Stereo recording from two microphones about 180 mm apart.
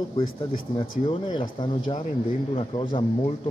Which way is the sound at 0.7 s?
25° left (ahead or behind).